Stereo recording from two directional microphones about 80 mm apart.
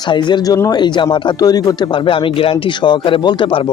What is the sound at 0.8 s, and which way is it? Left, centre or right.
Speech, left.